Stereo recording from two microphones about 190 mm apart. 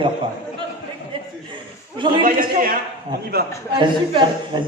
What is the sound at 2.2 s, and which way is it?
Speech, 45° right (ahead or behind).